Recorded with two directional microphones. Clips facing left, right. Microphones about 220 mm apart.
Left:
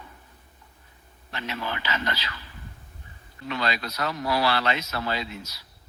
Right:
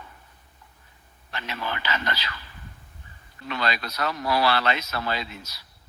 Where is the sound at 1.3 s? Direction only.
20° left (ahead or behind).